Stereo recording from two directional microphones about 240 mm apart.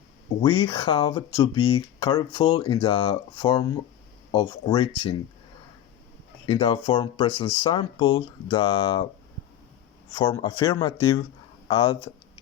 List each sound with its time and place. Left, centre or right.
0.4 s speech: centre
6.4 s speech: left
10.2 s speech: centre